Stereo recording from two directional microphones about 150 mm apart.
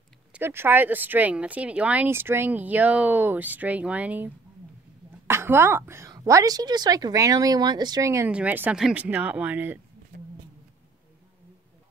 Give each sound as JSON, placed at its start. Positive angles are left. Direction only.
{"t": 0.3, "sound": "a woman's voice", "side_deg": -15}
{"t": 8.3, "sound": "speech", "side_deg": -10}